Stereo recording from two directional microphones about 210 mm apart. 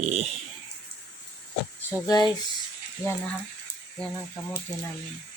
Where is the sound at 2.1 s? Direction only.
20° left (ahead or behind).